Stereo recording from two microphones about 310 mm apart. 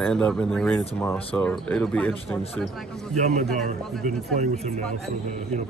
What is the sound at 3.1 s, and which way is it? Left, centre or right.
Speech, right.